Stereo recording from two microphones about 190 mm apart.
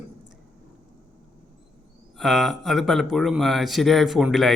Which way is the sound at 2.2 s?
Centre (ahead or behind).